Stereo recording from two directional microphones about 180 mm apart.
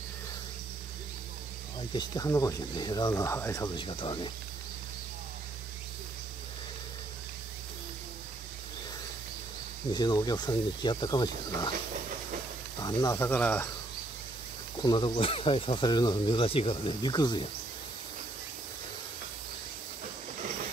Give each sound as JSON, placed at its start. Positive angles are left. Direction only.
{"t": 2.0, "sound": "speech", "side_deg": 20}
{"t": 9.9, "sound": "speech", "side_deg": 20}
{"t": 12.8, "sound": "speech", "side_deg": 20}
{"t": 14.8, "sound": "speech", "side_deg": 25}